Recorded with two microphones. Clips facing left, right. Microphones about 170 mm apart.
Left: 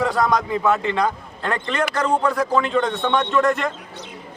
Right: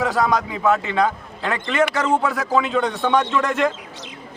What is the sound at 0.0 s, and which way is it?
A man's voice, centre (ahead or behind).